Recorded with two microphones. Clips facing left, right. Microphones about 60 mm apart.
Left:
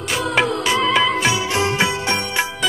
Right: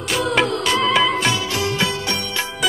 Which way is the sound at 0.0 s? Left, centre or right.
Centre.